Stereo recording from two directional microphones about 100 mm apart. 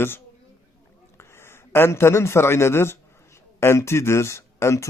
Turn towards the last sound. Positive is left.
turn(degrees=30)  # may be behind; listen again after turning